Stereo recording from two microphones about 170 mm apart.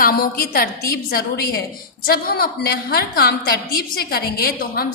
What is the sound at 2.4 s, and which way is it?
A woman's voice, 65° left (ahead or behind).